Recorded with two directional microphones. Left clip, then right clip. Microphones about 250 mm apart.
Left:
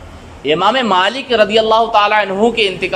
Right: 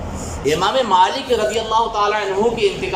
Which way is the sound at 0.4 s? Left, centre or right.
Left.